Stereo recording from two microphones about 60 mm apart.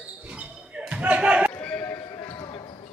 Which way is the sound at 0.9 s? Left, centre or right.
Right.